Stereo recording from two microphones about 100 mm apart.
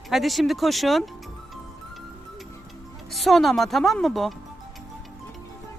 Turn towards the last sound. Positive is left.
turn(degrees=0)  # may be behind; listen again after turning